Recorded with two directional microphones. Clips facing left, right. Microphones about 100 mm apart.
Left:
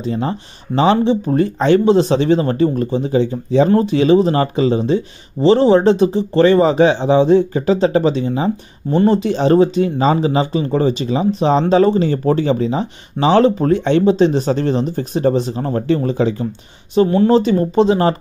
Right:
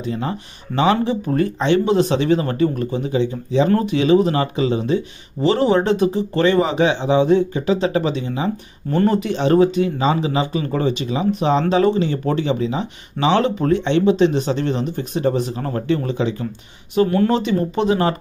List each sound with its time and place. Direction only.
0.0 s speech: 30° left (ahead or behind)
16.9 s speech: 25° left (ahead or behind)